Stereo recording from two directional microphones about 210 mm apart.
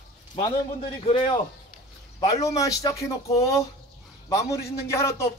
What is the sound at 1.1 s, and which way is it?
Speech, 25° left (ahead or behind).